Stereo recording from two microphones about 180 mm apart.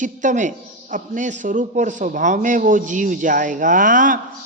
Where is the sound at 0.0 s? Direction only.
45° right (ahead or behind).